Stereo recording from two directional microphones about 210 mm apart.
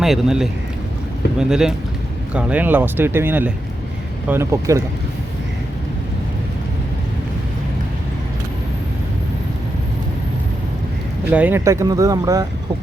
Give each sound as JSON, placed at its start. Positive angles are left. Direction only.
{"t": 0.0, "sound": "a man's voice", "side_deg": 0}
{"t": 11.3, "sound": "speech", "side_deg": -10}